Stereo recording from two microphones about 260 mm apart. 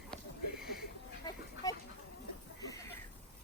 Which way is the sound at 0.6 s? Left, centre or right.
Left.